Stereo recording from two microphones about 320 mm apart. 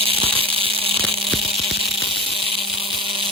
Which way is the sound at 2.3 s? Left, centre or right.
Centre.